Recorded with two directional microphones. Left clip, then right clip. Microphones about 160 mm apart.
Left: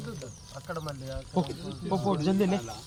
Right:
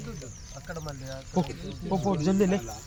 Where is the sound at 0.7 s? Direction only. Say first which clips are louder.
Left 2 dB; 15° left (ahead or behind).